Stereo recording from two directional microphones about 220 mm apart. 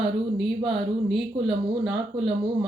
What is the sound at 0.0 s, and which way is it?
Speech, centre (ahead or behind).